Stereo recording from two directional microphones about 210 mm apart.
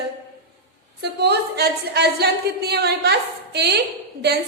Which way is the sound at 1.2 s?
50° right (ahead or behind).